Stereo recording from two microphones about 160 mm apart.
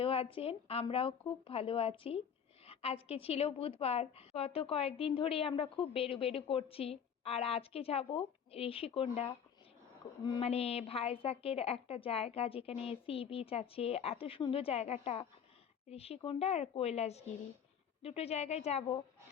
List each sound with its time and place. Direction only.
0.0 s a woman's voice: 35° left (ahead or behind)
10.4 s a woman's voice: 40° left (ahead or behind)